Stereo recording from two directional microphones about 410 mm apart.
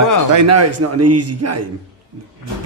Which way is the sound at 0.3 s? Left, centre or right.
Right.